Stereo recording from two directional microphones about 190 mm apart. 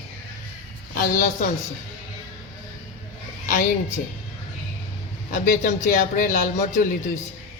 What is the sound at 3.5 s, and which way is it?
Speech, 45° left (ahead or behind).